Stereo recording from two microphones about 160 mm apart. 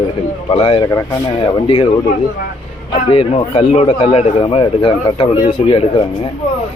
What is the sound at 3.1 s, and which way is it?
Speech, 35° left (ahead or behind).